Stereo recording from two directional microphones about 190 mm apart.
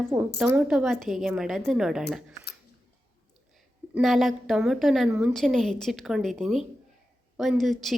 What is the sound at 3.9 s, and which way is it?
A woman's voice, centre (ahead or behind).